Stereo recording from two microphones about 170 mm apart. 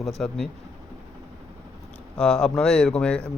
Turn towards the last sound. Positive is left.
turn(degrees=5)  # may be behind; listen again after turning